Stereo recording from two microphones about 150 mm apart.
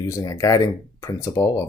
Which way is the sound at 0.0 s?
20° left (ahead or behind).